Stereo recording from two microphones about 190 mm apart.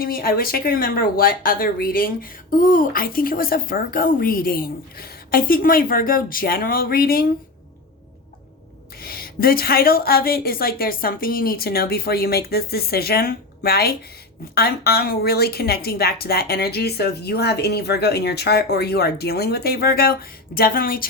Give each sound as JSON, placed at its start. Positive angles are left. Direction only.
{"t": 0.0, "sound": "a woman's voice", "side_deg": 50}
{"t": 9.0, "sound": "a woman's voice", "side_deg": 50}